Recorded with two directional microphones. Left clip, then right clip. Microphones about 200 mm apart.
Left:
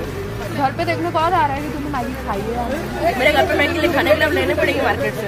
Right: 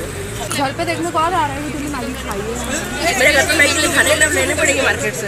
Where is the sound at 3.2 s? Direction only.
40° left (ahead or behind).